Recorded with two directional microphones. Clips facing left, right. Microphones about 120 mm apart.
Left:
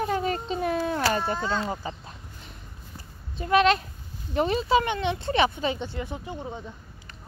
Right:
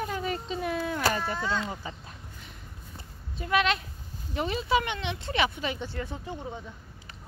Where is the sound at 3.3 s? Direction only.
35° left (ahead or behind).